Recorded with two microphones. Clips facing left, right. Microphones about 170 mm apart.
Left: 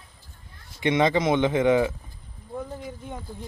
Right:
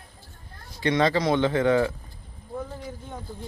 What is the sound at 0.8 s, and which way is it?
Speech, 20° left (ahead or behind).